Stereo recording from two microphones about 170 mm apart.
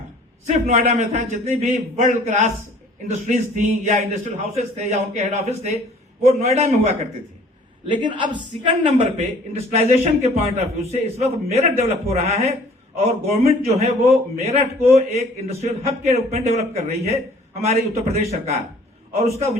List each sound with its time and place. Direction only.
0.4 s a man's voice: 45° right (ahead or behind)
7.9 s a man's voice: 25° right (ahead or behind)